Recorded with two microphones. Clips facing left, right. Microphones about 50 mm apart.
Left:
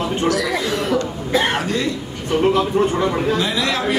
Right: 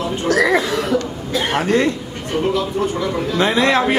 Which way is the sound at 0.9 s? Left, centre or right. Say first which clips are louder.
Left 1 dB; left.